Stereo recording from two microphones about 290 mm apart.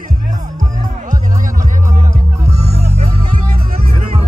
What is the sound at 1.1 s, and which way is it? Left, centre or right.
Music, right.